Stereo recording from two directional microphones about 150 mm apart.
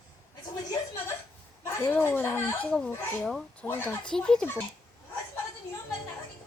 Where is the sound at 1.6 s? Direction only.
15° left (ahead or behind).